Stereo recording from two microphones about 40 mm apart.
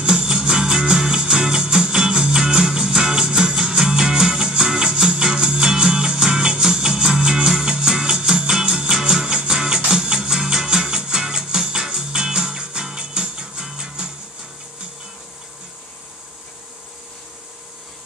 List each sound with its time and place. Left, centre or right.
0.0 s music: centre